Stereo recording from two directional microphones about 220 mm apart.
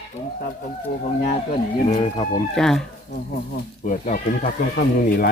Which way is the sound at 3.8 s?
35° left (ahead or behind).